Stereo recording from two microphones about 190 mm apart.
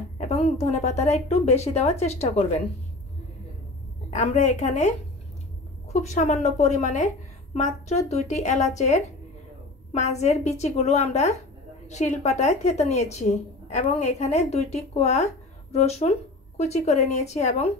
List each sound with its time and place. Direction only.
0.2 s a woman's voice: 35° left (ahead or behind)
4.1 s a woman's voice: 40° left (ahead or behind)
5.9 s a woman's voice: 40° left (ahead or behind)
10.2 s a woman's voice: 35° left (ahead or behind)